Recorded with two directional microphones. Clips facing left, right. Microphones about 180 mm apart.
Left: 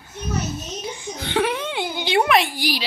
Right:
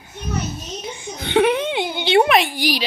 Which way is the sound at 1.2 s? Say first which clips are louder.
Right 6 dB; 20° right (ahead or behind).